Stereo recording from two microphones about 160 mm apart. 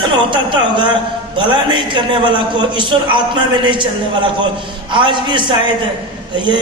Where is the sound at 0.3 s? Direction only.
30° right (ahead or behind).